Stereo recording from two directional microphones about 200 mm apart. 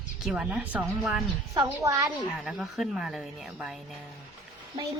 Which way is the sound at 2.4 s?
Centre (ahead or behind).